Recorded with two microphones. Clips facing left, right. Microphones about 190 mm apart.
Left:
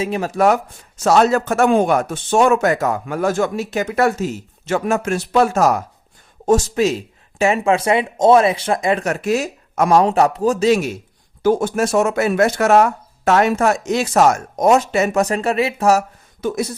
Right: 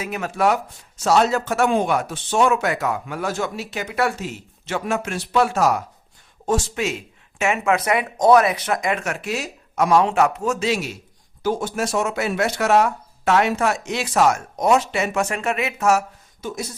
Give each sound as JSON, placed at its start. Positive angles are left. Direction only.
{"t": 0.0, "sound": "speech", "side_deg": 30}
{"t": 10.7, "sound": "speech", "side_deg": 50}